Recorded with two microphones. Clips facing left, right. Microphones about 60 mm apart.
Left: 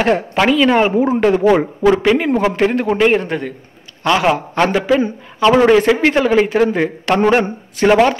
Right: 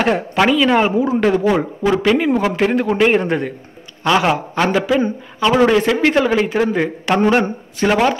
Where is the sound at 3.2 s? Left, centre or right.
Centre.